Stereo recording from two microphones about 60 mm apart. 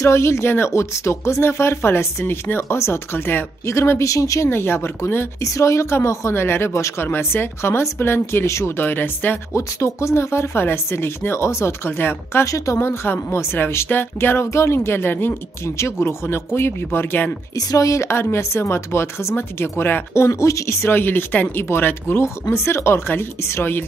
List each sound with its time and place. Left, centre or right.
0.0 s speech: left
4.0 s speech: left
4.5 s speech: left
5.4 s speech: left
8.7 s speech: left
9.5 s speech: left
12.4 s speech: left
12.7 s speech: left
14.4 s speech: left
17.6 s speech: left
20.2 s speech: left
22.2 s speech: left